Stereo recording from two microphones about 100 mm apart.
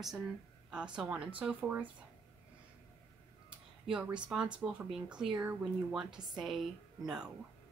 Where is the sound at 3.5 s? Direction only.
10° right (ahead or behind).